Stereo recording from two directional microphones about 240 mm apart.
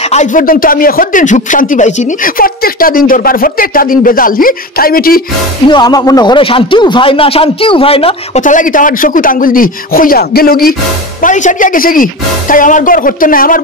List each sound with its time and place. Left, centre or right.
0.1 s a man's voice: left
5.7 s a man's voice: centre; by 13.6 s left